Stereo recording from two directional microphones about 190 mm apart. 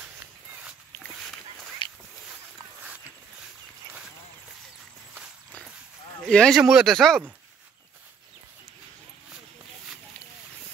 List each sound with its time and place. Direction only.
1.8 s boat: 25° left (ahead or behind)
6.2 s speech: 5° left (ahead or behind)